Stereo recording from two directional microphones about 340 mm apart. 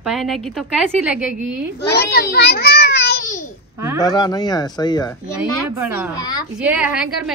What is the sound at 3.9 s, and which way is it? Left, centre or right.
Speech, centre.